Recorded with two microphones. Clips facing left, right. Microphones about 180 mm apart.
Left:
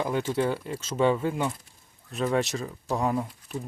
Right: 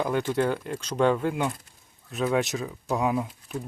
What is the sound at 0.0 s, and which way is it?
Speech, centre (ahead or behind).